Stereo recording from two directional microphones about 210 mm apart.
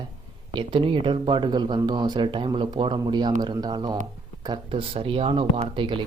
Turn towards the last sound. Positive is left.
turn(degrees=-25)  # may be behind; listen again after turning